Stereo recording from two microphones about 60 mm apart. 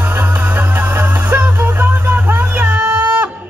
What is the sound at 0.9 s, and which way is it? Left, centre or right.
Music, right.